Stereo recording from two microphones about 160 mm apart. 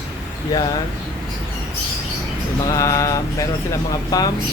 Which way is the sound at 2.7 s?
20° left (ahead or behind).